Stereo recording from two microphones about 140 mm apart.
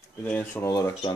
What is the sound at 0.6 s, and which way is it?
Speech, 20° left (ahead or behind).